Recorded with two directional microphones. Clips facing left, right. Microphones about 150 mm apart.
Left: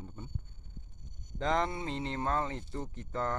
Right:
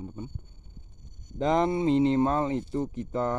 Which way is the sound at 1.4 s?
15° right (ahead or behind).